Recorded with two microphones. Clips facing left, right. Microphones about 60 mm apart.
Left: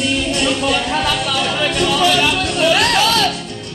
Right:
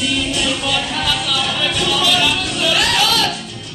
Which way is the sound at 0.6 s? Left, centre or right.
Left.